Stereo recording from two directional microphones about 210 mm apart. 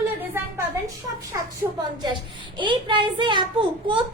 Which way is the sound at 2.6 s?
20° right (ahead or behind).